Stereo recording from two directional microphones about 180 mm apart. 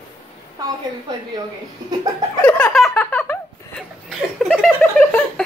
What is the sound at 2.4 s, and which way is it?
Laughter, 5° left (ahead or behind).